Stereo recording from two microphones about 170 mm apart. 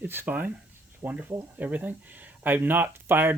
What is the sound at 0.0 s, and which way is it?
Speech, 10° right (ahead or behind).